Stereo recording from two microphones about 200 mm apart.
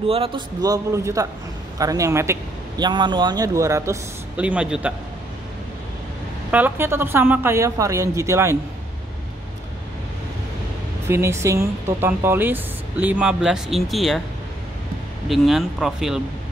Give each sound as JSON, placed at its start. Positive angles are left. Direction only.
{"t": 0.1, "sound": "a man's voice", "side_deg": -25}
{"t": 6.5, "sound": "a man's voice", "side_deg": -10}
{"t": 11.1, "sound": "a man's voice", "side_deg": -15}
{"t": 15.2, "sound": "speech", "side_deg": 0}